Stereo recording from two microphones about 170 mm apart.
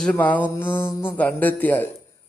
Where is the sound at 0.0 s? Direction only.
5° left (ahead or behind).